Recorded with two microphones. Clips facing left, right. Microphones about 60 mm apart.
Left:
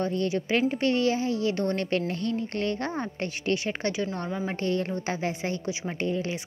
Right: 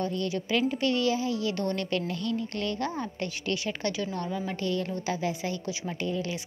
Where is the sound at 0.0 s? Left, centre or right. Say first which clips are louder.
Left 3 dB; left.